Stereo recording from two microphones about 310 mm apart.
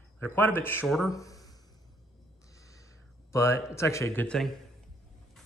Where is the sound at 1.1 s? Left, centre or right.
Centre.